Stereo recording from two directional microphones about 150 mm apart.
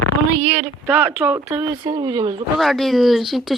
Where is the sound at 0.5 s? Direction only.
10° right (ahead or behind).